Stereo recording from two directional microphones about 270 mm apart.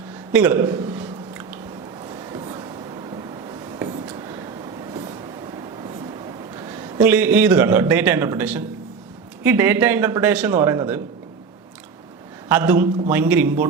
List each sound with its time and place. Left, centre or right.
0.3 s a sound: centre
3.8 s whispering: centre
6.6 s a man's voice: centre
12.5 s a man's voice: centre